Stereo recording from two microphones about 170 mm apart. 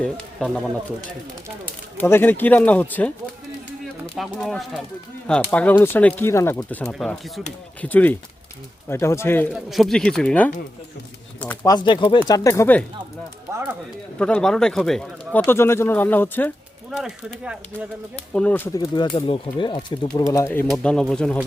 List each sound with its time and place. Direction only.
0.0 s speech: 5° left (ahead or behind)
2.0 s speech: 15° left (ahead or behind)
4.1 s speech: 5° left (ahead or behind)
9.5 s speech: centre (ahead or behind)
11.6 s speech: 25° left (ahead or behind)
13.5 s speech: 15° right (ahead or behind)
14.2 s speech: 5° left (ahead or behind)
16.9 s speech: 5° right (ahead or behind)
18.3 s speech: 10° left (ahead or behind)
18.8 s speech: 25° left (ahead or behind)
20.7 s speech: 5° left (ahead or behind)